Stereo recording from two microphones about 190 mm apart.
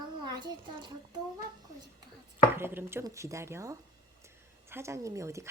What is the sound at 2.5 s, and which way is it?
A child's voice, 10° right (ahead or behind).